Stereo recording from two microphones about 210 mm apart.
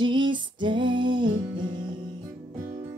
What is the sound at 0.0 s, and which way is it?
Female singing, 20° right (ahead or behind).